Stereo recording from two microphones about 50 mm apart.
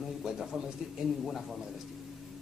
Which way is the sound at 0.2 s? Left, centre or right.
Centre.